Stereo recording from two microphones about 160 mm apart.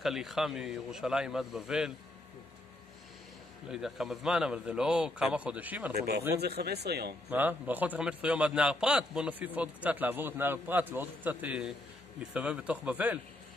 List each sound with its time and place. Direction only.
0.0 s a man's voice: centre (ahead or behind)
3.7 s a man's voice: centre (ahead or behind)
5.9 s speech: 80° right
6.3 s speech: 90° right
7.2 s a man's voice: 10° right (ahead or behind)